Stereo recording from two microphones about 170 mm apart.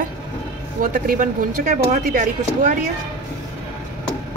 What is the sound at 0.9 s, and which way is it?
Speech, 55° right (ahead or behind).